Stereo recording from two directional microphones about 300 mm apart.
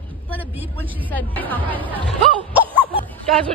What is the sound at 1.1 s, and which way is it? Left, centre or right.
Speech, centre.